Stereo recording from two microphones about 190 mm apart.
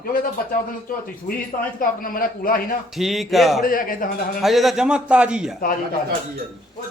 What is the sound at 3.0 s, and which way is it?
Speech, centre (ahead or behind).